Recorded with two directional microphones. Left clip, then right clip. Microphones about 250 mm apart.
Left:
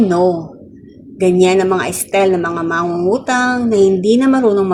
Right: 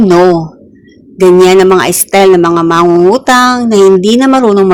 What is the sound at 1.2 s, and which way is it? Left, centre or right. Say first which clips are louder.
A woman's voice: right 8 dB; right.